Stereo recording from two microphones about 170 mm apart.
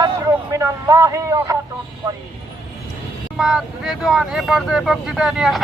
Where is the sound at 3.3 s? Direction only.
5° right (ahead or behind).